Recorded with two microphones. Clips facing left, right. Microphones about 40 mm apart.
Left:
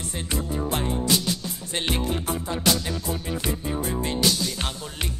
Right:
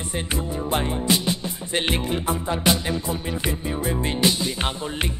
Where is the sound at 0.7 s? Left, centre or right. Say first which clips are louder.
Right 3 dB; right.